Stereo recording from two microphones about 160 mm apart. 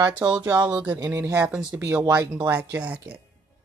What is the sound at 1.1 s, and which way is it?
A woman's voice, 15° right (ahead or behind).